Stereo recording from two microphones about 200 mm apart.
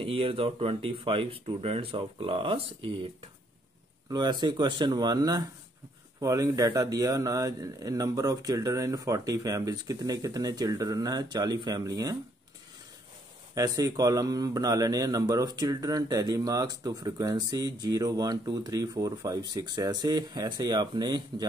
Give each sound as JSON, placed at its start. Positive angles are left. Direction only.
{"t": 0.0, "sound": "a man's voice", "side_deg": -30}
{"t": 4.1, "sound": "a man's voice", "side_deg": -20}
{"t": 13.6, "sound": "a man's voice", "side_deg": -15}